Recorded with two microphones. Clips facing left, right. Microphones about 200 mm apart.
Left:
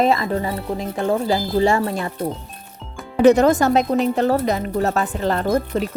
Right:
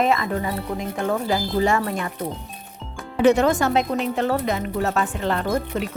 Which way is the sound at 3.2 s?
40° left (ahead or behind).